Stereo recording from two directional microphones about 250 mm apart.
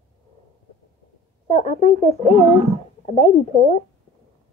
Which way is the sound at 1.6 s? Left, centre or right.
Left.